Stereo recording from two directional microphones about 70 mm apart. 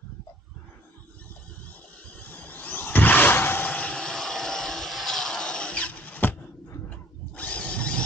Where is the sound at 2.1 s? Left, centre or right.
Left.